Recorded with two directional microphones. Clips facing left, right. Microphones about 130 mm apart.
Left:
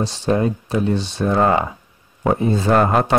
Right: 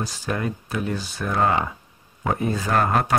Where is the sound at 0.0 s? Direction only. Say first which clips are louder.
Left 8 dB; 30° left (ahead or behind).